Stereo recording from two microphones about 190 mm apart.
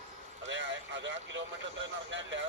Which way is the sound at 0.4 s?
75° right (ahead or behind).